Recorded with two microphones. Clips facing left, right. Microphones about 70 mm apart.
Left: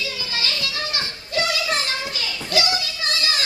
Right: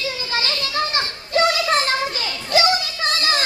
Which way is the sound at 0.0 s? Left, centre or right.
Right.